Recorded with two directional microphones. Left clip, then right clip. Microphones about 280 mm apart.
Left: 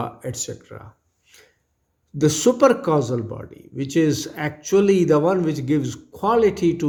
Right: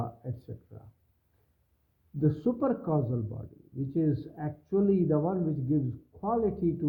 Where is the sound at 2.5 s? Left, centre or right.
Left.